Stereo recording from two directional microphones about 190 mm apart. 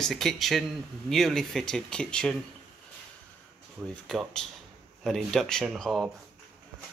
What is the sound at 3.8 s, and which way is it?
Speech, 5° left (ahead or behind).